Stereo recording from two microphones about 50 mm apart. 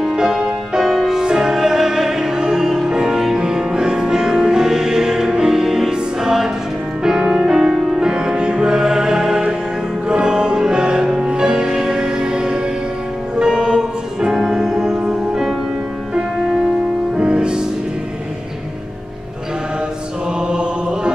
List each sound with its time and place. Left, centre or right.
0.1 s music: centre
17.2 s music: centre
20.4 s chant: centre